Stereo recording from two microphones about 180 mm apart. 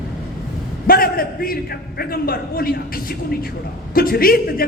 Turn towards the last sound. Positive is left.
turn(degrees=55)  # may be behind; listen again after turning